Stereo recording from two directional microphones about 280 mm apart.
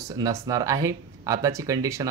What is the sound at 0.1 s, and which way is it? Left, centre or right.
Speech, centre.